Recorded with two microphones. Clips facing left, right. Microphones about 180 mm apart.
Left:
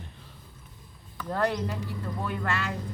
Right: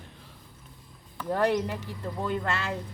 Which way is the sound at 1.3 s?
15° right (ahead or behind).